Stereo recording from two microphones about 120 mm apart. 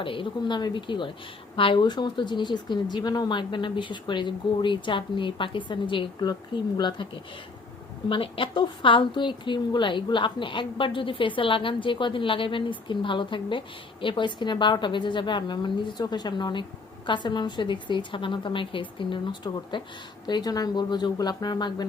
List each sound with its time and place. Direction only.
0.0 s speech: 45° left (ahead or behind)
8.1 s a woman's voice: 45° left (ahead or behind)